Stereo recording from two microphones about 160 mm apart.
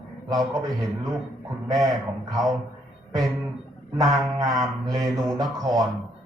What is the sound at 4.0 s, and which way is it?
Speech, 25° right (ahead or behind).